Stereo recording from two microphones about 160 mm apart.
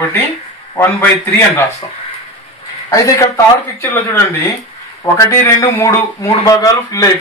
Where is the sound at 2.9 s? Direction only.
20° left (ahead or behind).